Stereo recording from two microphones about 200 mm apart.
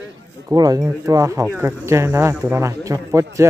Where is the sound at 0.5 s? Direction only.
20° right (ahead or behind).